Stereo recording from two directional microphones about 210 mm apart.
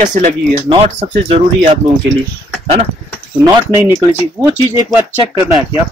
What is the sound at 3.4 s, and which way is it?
Speech, 15° right (ahead or behind).